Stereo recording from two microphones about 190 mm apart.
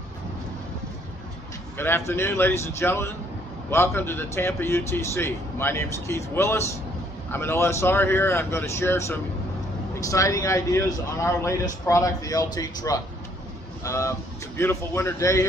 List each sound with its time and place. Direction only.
1.8 s a man's voice: 10° left (ahead or behind)